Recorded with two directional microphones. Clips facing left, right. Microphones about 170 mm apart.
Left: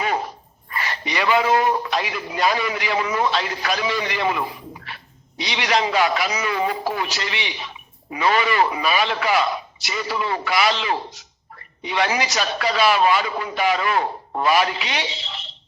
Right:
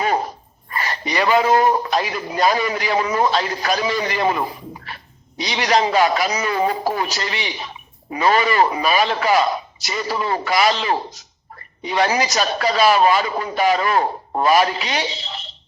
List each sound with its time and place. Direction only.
0.0 s a woman's voice: 40° right (ahead or behind)